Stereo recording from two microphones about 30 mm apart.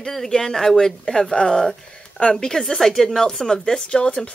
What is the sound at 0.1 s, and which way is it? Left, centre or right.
Speech, centre.